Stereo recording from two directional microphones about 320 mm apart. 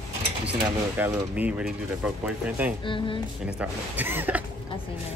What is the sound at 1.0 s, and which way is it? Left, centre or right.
Speech, centre.